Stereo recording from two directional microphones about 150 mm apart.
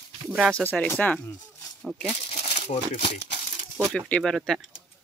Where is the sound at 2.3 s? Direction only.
40° left (ahead or behind).